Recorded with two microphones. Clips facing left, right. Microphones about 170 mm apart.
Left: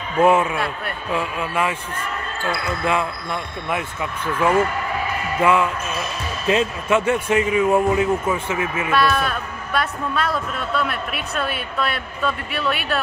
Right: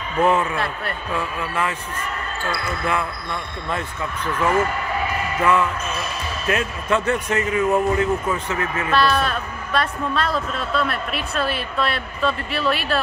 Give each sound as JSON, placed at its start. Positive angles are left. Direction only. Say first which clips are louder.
{"t": 0.2, "sound": "speech", "louder": "left 3 dB", "side_deg": 10}
{"t": 6.9, "sound": "speech", "louder": "left 2 dB", "side_deg": 10}